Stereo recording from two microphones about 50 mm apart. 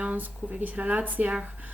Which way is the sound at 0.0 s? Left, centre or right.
Right.